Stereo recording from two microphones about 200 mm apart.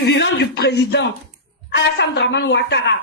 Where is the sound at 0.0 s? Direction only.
60° left (ahead or behind).